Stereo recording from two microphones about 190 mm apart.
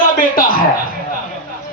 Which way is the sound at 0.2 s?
50° left (ahead or behind).